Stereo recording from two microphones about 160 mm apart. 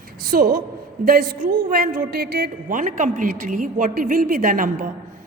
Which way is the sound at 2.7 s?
55° right (ahead or behind).